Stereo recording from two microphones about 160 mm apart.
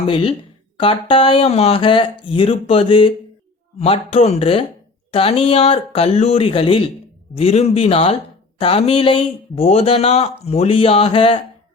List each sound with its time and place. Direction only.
0.1 s a man's voice: 35° left (ahead or behind)